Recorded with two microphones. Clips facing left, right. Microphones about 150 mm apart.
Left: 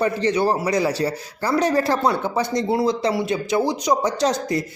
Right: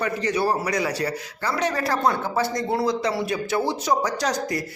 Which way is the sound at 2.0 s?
15° left (ahead or behind).